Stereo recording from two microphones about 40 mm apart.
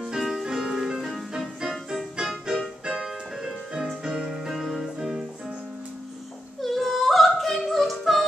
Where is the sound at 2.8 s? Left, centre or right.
Right.